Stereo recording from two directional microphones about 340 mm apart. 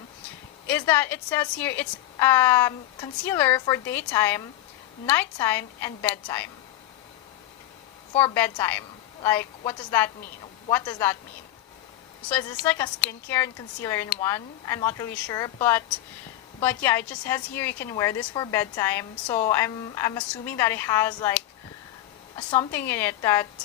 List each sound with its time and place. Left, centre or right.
0.7 s a woman's voice: centre
8.2 s a woman's voice: centre
12.3 s a woman's voice: centre